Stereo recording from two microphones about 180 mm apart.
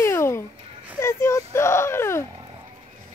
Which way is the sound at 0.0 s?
15° left (ahead or behind).